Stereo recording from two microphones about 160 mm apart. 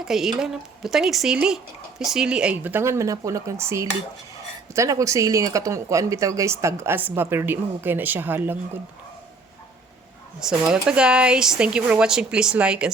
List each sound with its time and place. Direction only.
0.0 s speech: centre (ahead or behind)
10.4 s speech: 5° right (ahead or behind)